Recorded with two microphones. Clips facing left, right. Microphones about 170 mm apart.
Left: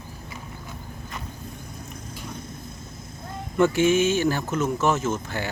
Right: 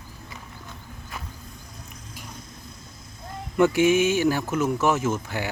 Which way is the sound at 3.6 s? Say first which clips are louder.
Right 1 dB; 15° right (ahead or behind).